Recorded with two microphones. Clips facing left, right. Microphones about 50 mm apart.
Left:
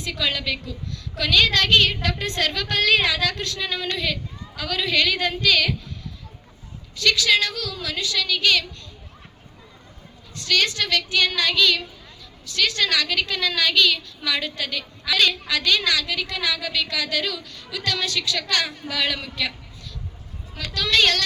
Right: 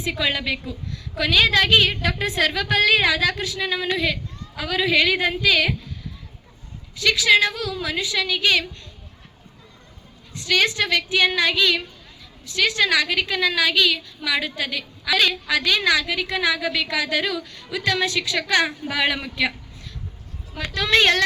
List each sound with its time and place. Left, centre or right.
0.0 s a woman's voice: right
6.9 s a woman's voice: centre
10.3 s a woman's voice: centre
20.6 s a woman's voice: right